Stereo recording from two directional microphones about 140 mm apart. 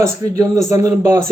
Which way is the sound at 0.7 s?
20° right (ahead or behind).